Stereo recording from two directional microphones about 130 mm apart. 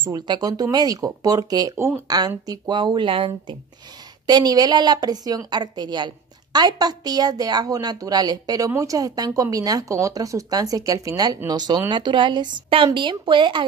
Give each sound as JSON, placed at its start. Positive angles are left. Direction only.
{"t": 0.0, "sound": "a woman's voice", "side_deg": -30}